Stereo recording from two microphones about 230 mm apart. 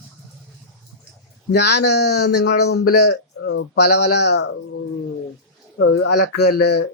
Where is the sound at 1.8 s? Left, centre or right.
Left.